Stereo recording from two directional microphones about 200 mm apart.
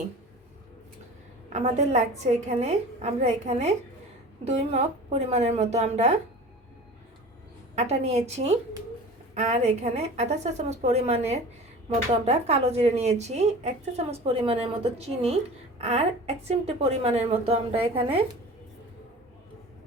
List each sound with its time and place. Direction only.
1.5 s speech: 35° right (ahead or behind)
7.8 s speech: 30° right (ahead or behind)